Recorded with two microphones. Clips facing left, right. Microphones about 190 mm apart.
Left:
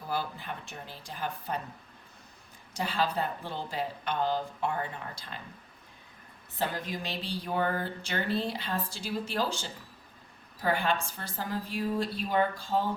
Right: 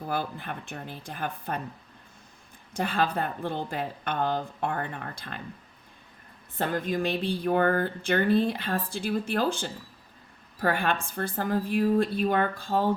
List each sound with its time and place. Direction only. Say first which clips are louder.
0.1 s speech: right 2 dB; 55° right (ahead or behind)
2.7 s speech: right 3 dB; 55° right (ahead or behind)
6.6 s a woman's voice: right 6 dB; 55° right (ahead or behind)